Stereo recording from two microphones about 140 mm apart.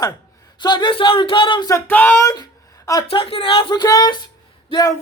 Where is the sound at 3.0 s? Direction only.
40° left (ahead or behind).